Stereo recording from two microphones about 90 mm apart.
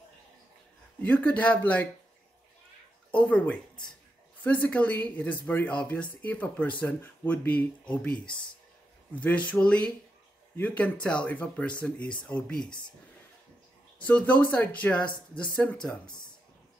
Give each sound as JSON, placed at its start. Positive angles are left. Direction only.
{"t": 1.0, "sound": "speech", "side_deg": 15}
{"t": 3.1, "sound": "speech", "side_deg": 15}
{"t": 14.0, "sound": "speech", "side_deg": 15}